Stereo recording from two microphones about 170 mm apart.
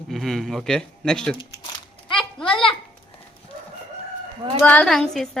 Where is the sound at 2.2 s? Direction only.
5° left (ahead or behind).